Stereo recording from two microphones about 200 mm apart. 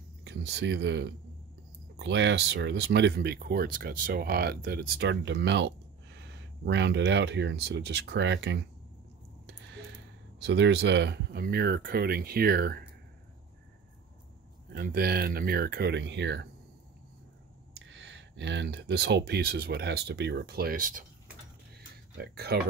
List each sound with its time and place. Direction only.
0.2 s speech: 55° right (ahead or behind)
9.7 s a sound: 60° right (ahead or behind)
10.4 s speech: 60° right (ahead or behind)
14.7 s speech: 50° right (ahead or behind)
17.8 s speech: 60° right (ahead or behind); by 21.0 s 45° right (ahead or behind)
21.7 s a sound: 50° right (ahead or behind)